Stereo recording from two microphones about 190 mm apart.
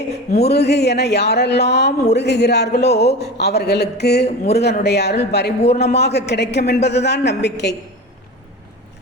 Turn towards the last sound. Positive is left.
turn(degrees=60)  # may be behind; listen again after turning